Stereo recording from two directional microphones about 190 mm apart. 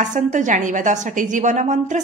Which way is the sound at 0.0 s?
40° right (ahead or behind).